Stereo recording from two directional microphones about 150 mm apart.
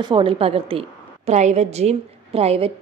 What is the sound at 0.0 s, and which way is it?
A woman's voice, 35° right (ahead or behind).